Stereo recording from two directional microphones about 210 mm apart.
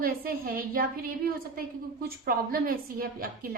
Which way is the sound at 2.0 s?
45° right (ahead or behind).